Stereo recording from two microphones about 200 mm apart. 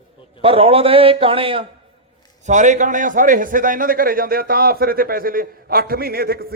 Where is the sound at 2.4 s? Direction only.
35° right (ahead or behind).